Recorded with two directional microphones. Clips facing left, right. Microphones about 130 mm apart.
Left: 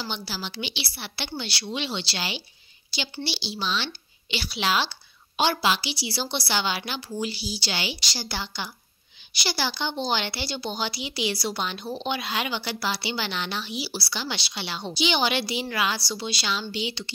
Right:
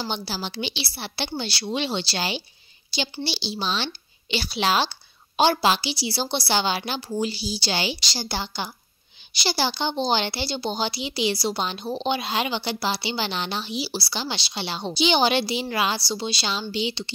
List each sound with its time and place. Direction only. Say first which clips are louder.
0.0 s a woman's voice: right 4 dB; 40° right (ahead or behind)